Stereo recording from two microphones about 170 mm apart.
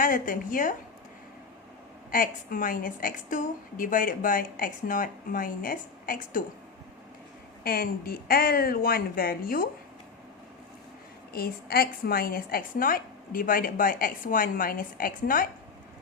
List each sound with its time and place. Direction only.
0.0 s a woman's voice: 55° left (ahead or behind)
2.0 s a woman's voice: 55° left (ahead or behind)
7.6 s a woman's voice: 60° left (ahead or behind)
11.3 s a woman's voice: 65° left (ahead or behind)